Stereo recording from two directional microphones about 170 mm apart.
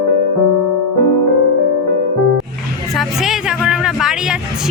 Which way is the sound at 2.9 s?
Centre (ahead or behind).